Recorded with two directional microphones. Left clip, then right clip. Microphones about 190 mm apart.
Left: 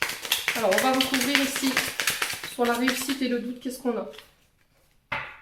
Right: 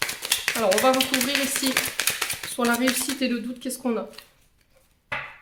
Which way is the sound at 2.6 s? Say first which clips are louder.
Right 1 dB; 40° right (ahead or behind).